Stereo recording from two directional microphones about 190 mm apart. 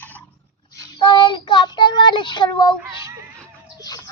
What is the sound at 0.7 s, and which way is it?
Child singing, 20° left (ahead or behind).